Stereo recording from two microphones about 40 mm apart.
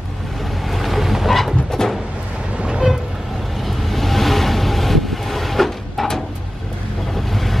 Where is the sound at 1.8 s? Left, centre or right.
Centre.